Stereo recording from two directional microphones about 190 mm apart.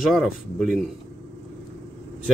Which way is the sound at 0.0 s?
Centre (ahead or behind).